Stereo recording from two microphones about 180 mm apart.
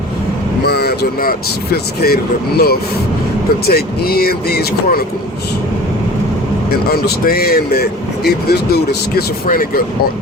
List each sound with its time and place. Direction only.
0.6 s speech: 65° left (ahead or behind)
6.7 s speech: 60° left (ahead or behind)